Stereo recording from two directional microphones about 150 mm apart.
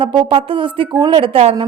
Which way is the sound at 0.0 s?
35° right (ahead or behind).